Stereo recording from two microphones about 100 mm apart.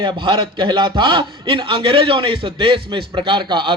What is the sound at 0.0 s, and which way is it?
A man's voice, 55° right (ahead or behind).